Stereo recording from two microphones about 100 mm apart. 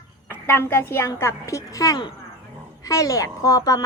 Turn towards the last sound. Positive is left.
turn(degrees=35)  # may be behind; listen again after turning